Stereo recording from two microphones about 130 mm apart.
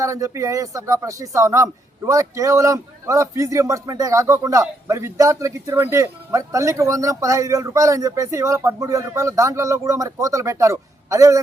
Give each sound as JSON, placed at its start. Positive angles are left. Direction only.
{"t": 0.0, "sound": "speech", "side_deg": -25}